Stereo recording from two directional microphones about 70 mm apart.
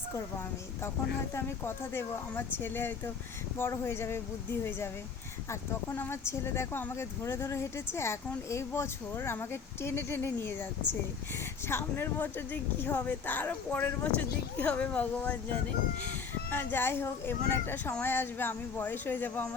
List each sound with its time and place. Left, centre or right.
0.1 s speech: left
5.9 s speech: left
6.2 s speech: left
11.7 s speech: left
16.5 s speech: left